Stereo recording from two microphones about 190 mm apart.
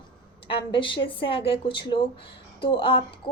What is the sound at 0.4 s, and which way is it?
A woman's voice, 25° left (ahead or behind).